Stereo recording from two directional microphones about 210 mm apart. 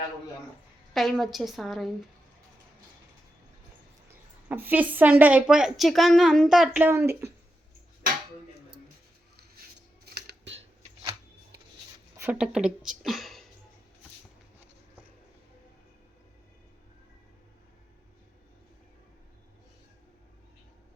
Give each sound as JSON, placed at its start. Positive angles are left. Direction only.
{"t": 0.9, "sound": "a woman's voice", "side_deg": 0}
{"t": 4.4, "sound": "a woman's voice", "side_deg": -10}
{"t": 10.2, "sound": "scissors", "side_deg": -55}
{"t": 12.1, "sound": "speech", "side_deg": -10}